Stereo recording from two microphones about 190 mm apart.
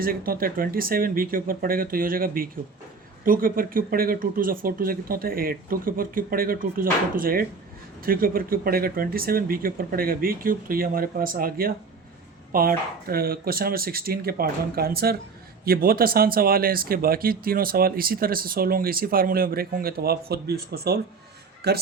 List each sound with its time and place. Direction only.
0.0 s speech: 50° right (ahead or behind)